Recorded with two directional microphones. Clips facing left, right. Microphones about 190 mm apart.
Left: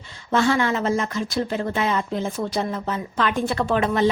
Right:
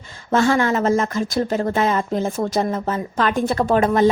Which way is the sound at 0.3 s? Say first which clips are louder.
Right 3 dB; 45° right (ahead or behind).